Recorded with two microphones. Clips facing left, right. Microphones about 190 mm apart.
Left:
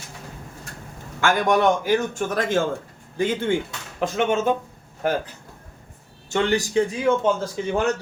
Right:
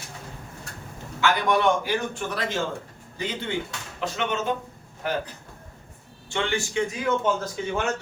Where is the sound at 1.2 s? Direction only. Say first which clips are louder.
Left 3 dB; 45° left (ahead or behind).